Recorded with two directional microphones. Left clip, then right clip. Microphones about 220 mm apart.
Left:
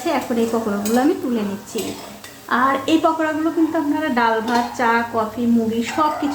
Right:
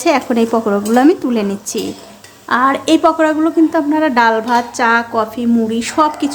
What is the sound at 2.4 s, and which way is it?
A woman's voice, 40° right (ahead or behind).